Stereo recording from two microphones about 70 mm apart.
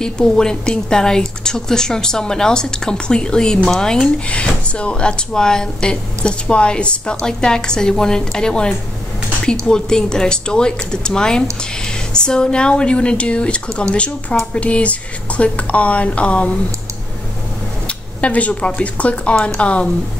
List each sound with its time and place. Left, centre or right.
0.0 s a woman's voice: centre
17.8 s a woman's voice: centre